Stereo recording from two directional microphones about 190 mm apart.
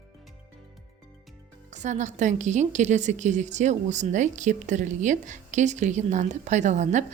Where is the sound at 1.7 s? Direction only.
40° right (ahead or behind).